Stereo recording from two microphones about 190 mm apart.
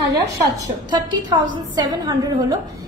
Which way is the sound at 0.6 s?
20° right (ahead or behind).